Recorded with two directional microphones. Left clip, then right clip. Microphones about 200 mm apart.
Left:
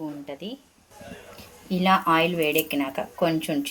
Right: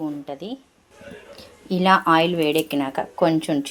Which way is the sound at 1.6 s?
30° right (ahead or behind).